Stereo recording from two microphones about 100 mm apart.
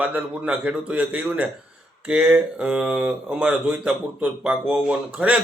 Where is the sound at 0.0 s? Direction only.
15° right (ahead or behind).